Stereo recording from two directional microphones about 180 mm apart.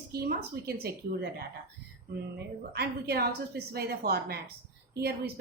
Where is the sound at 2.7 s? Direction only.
60° right (ahead or behind).